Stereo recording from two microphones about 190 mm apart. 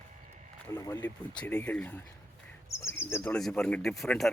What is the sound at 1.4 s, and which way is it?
Speech, 5° left (ahead or behind).